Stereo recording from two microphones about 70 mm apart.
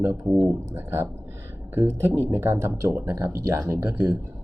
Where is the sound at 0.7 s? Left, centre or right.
Right.